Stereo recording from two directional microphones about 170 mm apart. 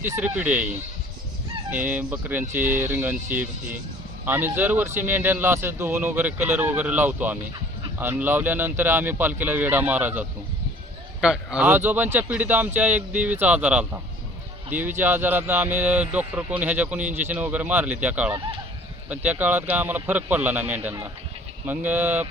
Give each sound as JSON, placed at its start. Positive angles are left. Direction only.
{"t": 0.0, "sound": "speech", "side_deg": -10}
{"t": 1.7, "sound": "speech", "side_deg": -10}